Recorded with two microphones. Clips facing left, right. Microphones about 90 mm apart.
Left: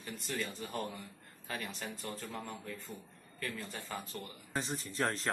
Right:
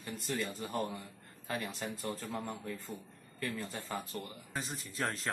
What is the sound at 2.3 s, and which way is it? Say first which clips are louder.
Speech: right 3 dB; 20° right (ahead or behind).